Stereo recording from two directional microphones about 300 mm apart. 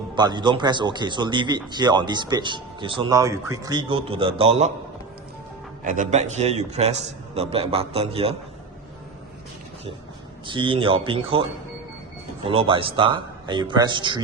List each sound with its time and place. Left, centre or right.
0.2 s a man's voice: centre
5.8 s a man's voice: right
10.4 s a man's voice: centre
12.5 s a man's voice: centre